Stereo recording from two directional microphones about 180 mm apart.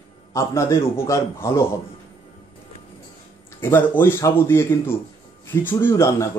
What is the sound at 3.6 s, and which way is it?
A man's voice, 10° left (ahead or behind).